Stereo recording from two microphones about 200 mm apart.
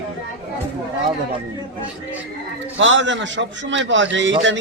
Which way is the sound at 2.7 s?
65° right (ahead or behind).